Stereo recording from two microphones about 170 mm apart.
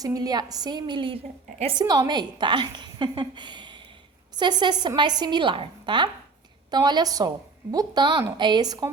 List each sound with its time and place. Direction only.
0.0 s a woman's voice: 20° right (ahead or behind)
1.8 s a woman's voice: 20° right (ahead or behind)